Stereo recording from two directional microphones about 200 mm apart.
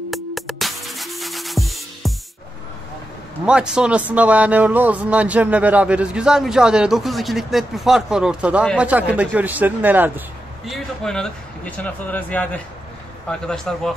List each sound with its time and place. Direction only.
0.1 s music: centre (ahead or behind)
3.4 s speech: 5° right (ahead or behind)